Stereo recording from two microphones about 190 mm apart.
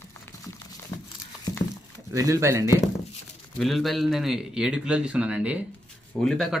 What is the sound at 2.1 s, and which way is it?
Speech, 15° right (ahead or behind).